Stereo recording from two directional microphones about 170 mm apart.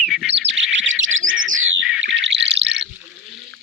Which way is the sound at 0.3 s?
90° right.